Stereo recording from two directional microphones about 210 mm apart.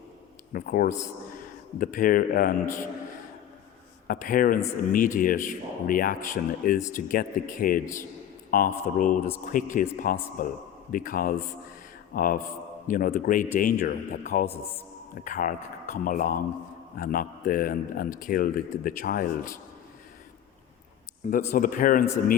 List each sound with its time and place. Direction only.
0.5 s a man's voice: 45° left (ahead or behind)
4.0 s a man's voice: 40° left (ahead or behind)
21.5 s a man's voice: 40° left (ahead or behind)